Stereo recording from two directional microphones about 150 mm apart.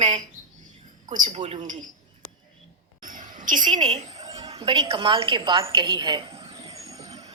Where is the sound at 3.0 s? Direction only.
60° right (ahead or behind).